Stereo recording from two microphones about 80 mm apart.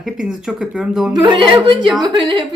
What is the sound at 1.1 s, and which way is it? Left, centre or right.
A woman's voice, right.